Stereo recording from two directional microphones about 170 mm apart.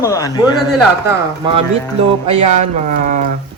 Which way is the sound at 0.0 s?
20° left (ahead or behind).